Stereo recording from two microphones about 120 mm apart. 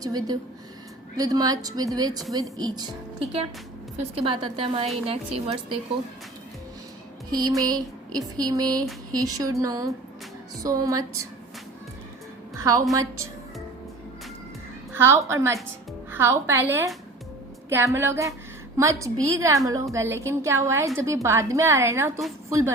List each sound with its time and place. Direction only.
0.0 s speech: 35° right (ahead or behind)
4.1 s a woman's voice: 50° right (ahead or behind)
7.3 s a woman's voice: 35° right (ahead or behind)
12.5 s a woman's voice: 30° right (ahead or behind)
14.9 s a woman's voice: 20° right (ahead or behind)